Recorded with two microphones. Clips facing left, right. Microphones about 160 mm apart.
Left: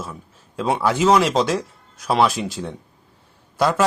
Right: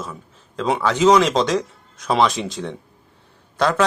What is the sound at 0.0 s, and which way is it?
Speech, 10° left (ahead or behind).